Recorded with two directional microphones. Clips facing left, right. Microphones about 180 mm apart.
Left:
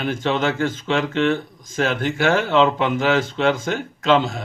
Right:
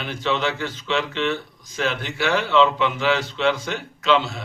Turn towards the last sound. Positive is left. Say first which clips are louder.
# left 3 dB
turn(degrees=45)  # may be behind; listen again after turning